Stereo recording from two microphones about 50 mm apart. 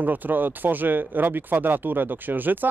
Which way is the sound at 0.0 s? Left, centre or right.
Right.